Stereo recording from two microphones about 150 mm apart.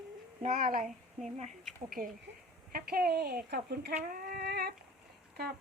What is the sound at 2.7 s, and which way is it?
Speech, 85° right.